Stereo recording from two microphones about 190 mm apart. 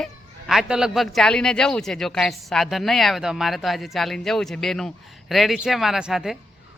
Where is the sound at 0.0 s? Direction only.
Centre (ahead or behind).